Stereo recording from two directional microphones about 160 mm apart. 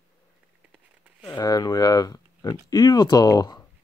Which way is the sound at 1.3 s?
25° left (ahead or behind).